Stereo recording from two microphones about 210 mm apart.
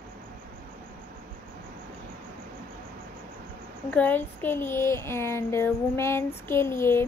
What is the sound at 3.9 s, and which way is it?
A child's voice, 10° left (ahead or behind).